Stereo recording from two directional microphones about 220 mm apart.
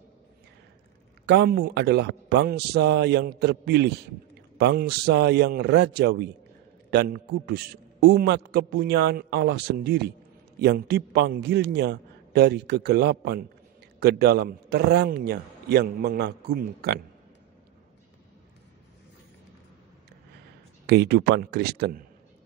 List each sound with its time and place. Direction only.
1.2 s a man's voice: 50° right (ahead or behind)
20.8 s a man's voice: 45° right (ahead or behind)